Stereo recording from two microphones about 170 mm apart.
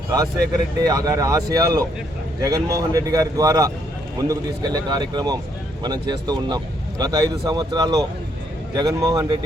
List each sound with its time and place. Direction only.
0.8 s speech: 20° right (ahead or behind)